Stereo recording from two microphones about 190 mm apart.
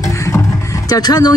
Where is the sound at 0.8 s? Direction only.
20° left (ahead or behind).